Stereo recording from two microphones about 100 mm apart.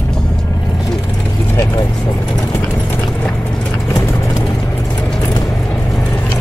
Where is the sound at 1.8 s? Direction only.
45° left (ahead or behind).